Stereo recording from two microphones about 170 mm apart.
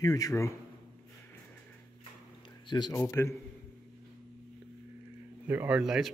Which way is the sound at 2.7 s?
25° left (ahead or behind).